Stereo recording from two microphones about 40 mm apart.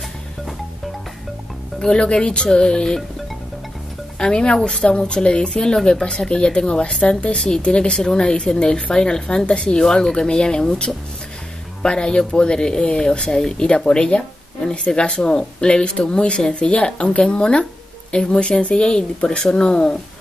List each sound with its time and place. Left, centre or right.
2.0 s speech: left
4.2 s speech: left
18.8 s speech: centre